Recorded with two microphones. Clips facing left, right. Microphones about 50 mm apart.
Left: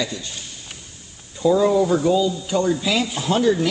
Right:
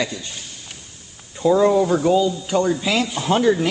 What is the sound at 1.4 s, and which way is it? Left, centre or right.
Speech, right.